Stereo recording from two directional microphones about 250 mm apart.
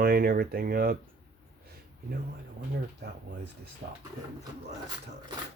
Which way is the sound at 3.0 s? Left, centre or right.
Right.